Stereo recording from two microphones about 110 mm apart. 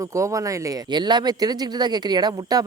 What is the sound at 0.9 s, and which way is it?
Speech, 40° right (ahead or behind).